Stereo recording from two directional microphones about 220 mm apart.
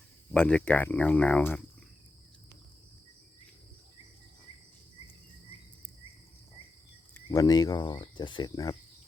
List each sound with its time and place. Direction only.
0.3 s speech: 5° left (ahead or behind)
7.1 s speech: 15° left (ahead or behind)